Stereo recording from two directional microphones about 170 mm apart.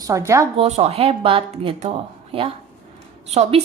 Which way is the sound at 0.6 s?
40° right (ahead or behind).